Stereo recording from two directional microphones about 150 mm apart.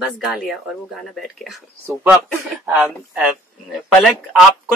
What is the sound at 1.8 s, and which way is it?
Speech, 15° right (ahead or behind).